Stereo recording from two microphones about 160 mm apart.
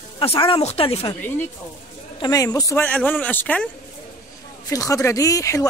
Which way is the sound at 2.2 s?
25° left (ahead or behind).